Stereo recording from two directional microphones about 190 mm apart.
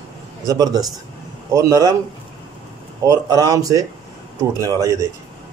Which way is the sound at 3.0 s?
20° right (ahead or behind).